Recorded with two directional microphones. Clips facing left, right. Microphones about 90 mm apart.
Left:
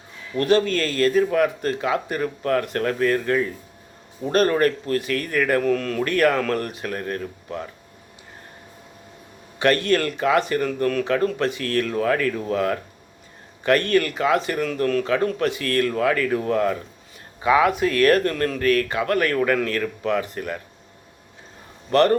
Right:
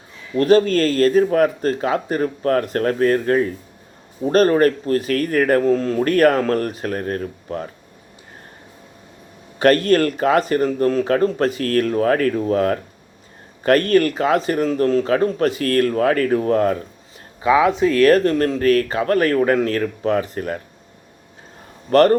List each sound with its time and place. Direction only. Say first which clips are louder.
0.3 s speech: right 5 dB; 40° right (ahead or behind)
5.6 s speech: right 4 dB; 25° right (ahead or behind)
6.1 s speech: right 4 dB; 40° right (ahead or behind)
9.6 s speech: right 5 dB; 40° right (ahead or behind)
17.5 s speech: right 3 dB; 15° right (ahead or behind)
17.9 s speech: right 4 dB; 30° right (ahead or behind)
18.6 s speech: right 1 dB; 35° right (ahead or behind)
21.9 s speech: right 4 dB; 40° right (ahead or behind)